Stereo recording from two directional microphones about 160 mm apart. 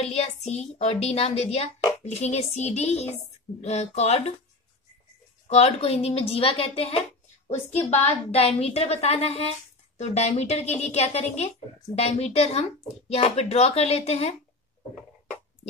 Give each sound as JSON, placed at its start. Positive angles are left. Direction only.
{"t": 0.0, "sound": "speech", "side_deg": 40}
{"t": 5.5, "sound": "speech", "side_deg": 40}